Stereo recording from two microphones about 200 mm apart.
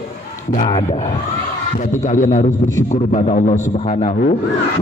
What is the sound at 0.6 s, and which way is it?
Music, 25° left (ahead or behind).